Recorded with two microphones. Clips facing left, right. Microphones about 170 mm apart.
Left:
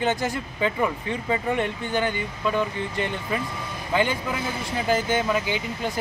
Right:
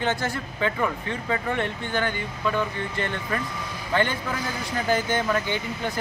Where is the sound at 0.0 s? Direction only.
15° left (ahead or behind).